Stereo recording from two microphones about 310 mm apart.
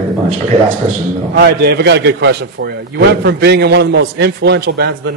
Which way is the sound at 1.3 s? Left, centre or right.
Right.